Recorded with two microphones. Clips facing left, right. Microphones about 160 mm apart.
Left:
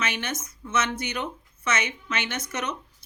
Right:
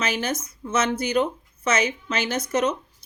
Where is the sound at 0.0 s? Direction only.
35° right (ahead or behind).